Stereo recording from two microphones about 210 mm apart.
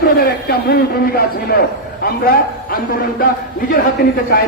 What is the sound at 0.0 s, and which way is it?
A man's voice, 45° left (ahead or behind).